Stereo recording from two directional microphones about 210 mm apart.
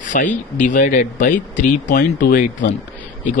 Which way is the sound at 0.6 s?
35° left (ahead or behind).